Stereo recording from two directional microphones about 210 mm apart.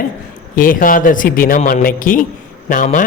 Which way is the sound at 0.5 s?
40° left (ahead or behind).